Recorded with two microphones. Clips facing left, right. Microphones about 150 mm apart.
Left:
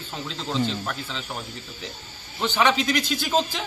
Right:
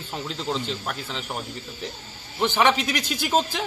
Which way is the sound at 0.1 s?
10° right (ahead or behind).